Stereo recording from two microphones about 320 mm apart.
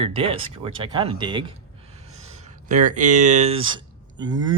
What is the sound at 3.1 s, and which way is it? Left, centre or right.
Speech, right.